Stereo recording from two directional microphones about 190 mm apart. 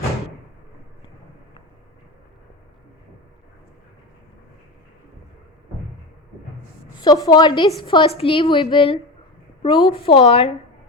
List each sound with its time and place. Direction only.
7.0 s a woman's voice: 20° left (ahead or behind)